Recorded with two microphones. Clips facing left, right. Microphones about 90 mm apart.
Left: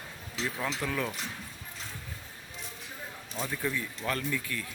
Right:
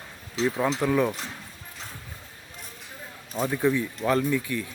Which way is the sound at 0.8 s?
20° right (ahead or behind).